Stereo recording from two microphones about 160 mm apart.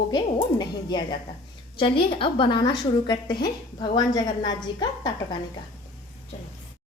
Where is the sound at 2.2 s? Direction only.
30° left (ahead or behind).